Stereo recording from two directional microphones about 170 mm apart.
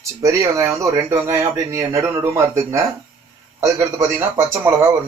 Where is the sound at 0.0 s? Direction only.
20° right (ahead or behind).